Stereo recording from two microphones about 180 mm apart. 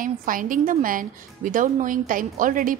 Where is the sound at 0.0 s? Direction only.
50° right (ahead or behind).